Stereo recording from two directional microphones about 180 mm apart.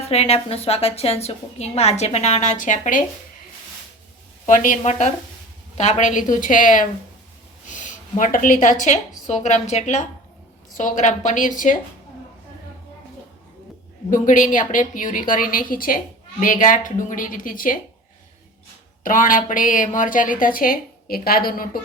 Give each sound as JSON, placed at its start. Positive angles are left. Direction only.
{"t": 0.1, "sound": "a woman's voice", "side_deg": 35}
{"t": 4.4, "sound": "a woman's voice", "side_deg": 45}
{"t": 7.7, "sound": "a sound", "side_deg": 45}
{"t": 8.8, "sound": "a woman's voice", "side_deg": 40}
{"t": 14.1, "sound": "a woman's voice", "side_deg": 45}
{"t": 19.0, "sound": "a woman's voice", "side_deg": 50}